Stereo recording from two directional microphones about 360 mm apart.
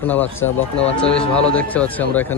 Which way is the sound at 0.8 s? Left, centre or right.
Centre.